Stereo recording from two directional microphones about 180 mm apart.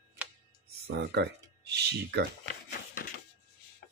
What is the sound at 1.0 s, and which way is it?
Speech, 65° right (ahead or behind).